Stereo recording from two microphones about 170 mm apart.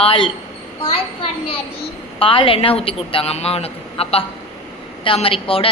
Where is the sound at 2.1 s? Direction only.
30° left (ahead or behind).